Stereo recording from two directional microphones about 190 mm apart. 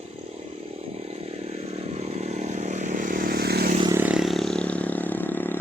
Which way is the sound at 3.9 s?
5° right (ahead or behind).